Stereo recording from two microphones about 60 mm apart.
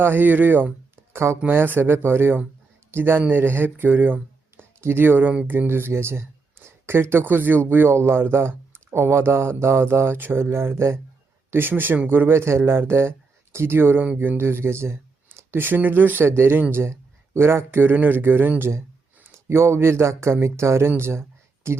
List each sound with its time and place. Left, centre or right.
0.0 s speech: right
1.1 s speech: right
1.5 s speech: right
15.5 s speech: right
16.8 s speech: right
19.5 s speech: right